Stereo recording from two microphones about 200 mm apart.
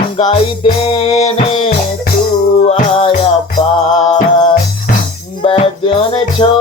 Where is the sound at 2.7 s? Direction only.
30° left (ahead or behind).